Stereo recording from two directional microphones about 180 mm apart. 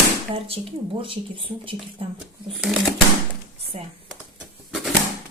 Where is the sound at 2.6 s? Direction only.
Centre (ahead or behind).